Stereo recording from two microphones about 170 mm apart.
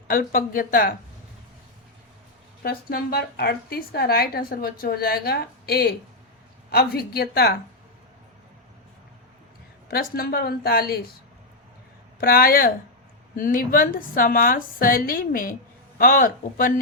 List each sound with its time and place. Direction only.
0.1 s a woman's voice: 55° left (ahead or behind)
2.6 s a woman's voice: 65° left (ahead or behind)
9.9 s a woman's voice: 65° left (ahead or behind)
12.2 s a woman's voice: 60° left (ahead or behind)